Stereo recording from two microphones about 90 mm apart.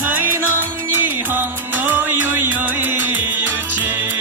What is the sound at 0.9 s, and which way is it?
Music, 20° right (ahead or behind).